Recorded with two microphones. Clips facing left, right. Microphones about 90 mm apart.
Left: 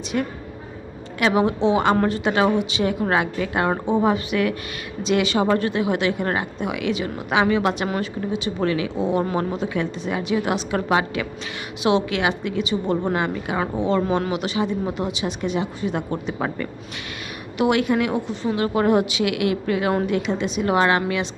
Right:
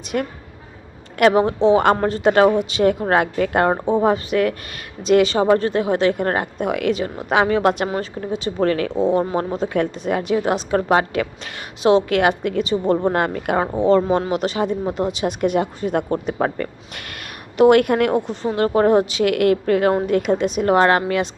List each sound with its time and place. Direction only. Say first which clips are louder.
0.1 s speech: right 2 dB; 50° right (ahead or behind)
1.3 s a woman's voice: right 2 dB; 40° right (ahead or behind)
13.1 s speech: right 4 dB; 50° right (ahead or behind)
13.7 s a woman's voice: right 5 dB; 40° right (ahead or behind)